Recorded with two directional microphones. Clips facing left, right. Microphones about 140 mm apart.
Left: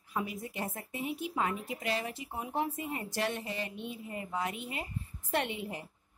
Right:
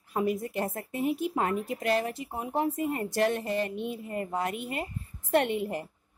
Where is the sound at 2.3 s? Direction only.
40° right (ahead or behind).